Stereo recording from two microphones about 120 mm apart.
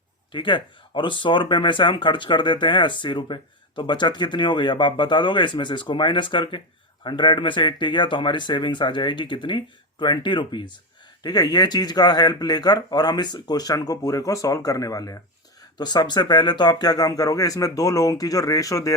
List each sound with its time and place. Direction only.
0.3 s speech: 45° left (ahead or behind)